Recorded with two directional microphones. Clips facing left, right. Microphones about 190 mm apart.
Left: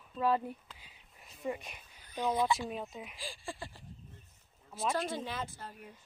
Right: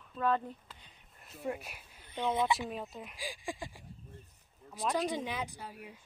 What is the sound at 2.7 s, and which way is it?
Speech, centre (ahead or behind).